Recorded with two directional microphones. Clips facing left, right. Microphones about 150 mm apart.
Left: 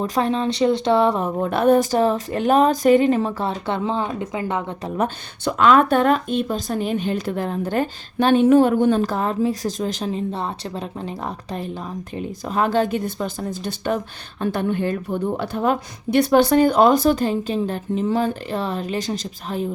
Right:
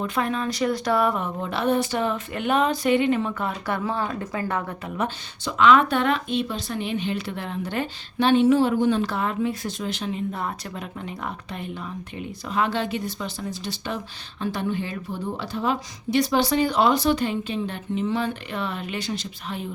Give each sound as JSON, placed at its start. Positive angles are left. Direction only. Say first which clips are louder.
{"t": 0.0, "sound": "speech", "louder": "left 5 dB", "side_deg": 30}
{"t": 1.4, "sound": "speech", "louder": "left 8 dB", "side_deg": 50}
{"t": 4.9, "sound": "speech", "louder": "left 5 dB", "side_deg": 45}
{"t": 12.1, "sound": "speech", "louder": "left 3 dB", "side_deg": 40}